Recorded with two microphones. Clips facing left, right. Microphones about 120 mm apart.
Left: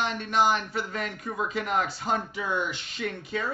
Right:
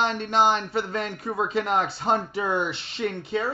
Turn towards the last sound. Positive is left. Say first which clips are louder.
# right 5 dB
turn(degrees=-30)  # may be behind; listen again after turning